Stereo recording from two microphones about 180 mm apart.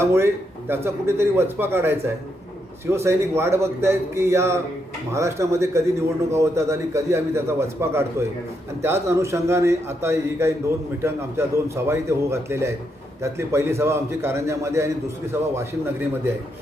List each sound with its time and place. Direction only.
0.0 s speech: 15° right (ahead or behind)